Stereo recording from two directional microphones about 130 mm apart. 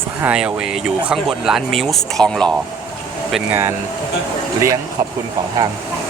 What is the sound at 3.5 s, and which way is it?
Speech, 20° right (ahead or behind).